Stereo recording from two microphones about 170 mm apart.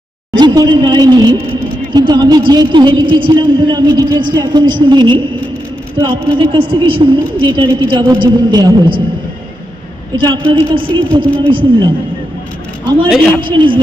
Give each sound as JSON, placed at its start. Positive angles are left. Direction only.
{"t": 0.3, "sound": "a man's voice", "side_deg": -25}
{"t": 6.4, "sound": "a woman's voice", "side_deg": -30}
{"t": 10.2, "sound": "a woman's voice", "side_deg": -25}
{"t": 13.1, "sound": "a man's voice", "side_deg": 0}
{"t": 13.4, "sound": "a woman's voice", "side_deg": -30}